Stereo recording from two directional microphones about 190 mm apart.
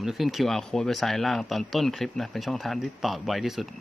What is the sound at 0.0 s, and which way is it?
Speech, centre (ahead or behind).